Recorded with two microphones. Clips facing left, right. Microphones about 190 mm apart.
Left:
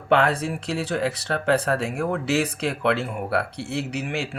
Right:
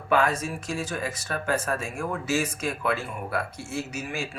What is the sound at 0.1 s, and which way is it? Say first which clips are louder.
Speech: left 3 dB; 65° left (ahead or behind).